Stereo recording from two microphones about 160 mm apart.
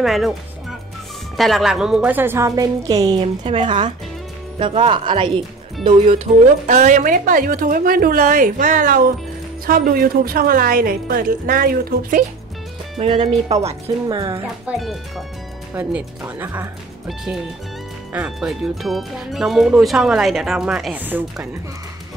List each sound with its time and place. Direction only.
0.0 s a woman's voice: centre (ahead or behind); by 12.3 s 65° right (ahead or behind)
12.9 s speech: 35° right (ahead or behind)
14.0 s speech: 25° right (ahead or behind)
14.8 s a woman's voice: centre (ahead or behind)
18.1 s speech: 5° right (ahead or behind)